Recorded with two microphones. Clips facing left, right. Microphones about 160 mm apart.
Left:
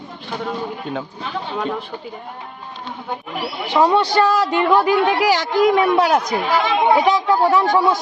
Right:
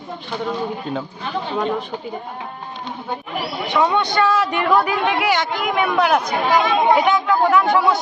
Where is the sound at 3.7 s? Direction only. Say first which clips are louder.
Left 3 dB; 30° left (ahead or behind).